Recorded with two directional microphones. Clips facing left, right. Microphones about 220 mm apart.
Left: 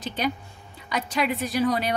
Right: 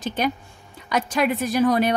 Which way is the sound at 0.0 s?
50° right (ahead or behind).